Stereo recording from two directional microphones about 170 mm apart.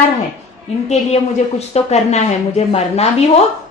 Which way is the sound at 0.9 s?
40° left (ahead or behind).